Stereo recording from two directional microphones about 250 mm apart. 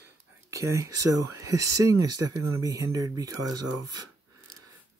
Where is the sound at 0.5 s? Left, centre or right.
Centre.